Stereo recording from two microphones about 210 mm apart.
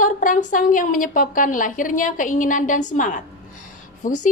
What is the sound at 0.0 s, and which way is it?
A woman's voice, 40° left (ahead or behind).